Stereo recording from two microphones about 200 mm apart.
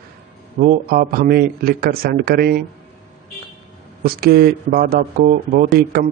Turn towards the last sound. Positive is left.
turn(degrees=-50)  # may be behind; listen again after turning